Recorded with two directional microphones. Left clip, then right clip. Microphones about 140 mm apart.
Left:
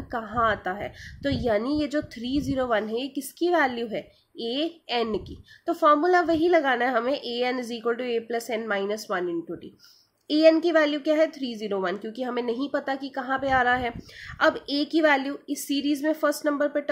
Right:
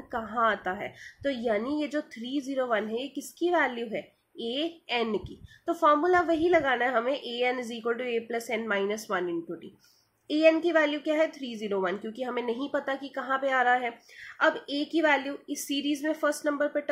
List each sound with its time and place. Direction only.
0.1 s a woman's voice: 30° left (ahead or behind)
10.2 s a woman's voice: 35° left (ahead or behind)